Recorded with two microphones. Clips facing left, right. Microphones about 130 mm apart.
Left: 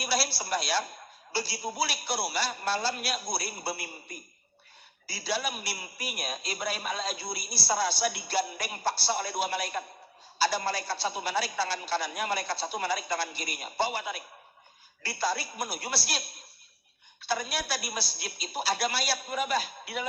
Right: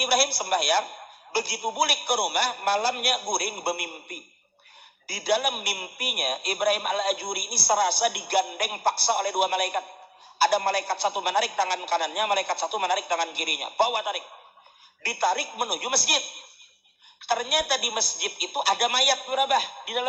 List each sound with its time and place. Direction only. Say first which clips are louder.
0.0 s a man's voice: right 6 dB; 60° right (ahead or behind)